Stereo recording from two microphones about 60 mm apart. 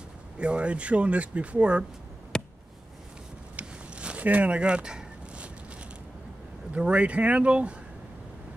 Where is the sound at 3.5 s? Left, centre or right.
Centre.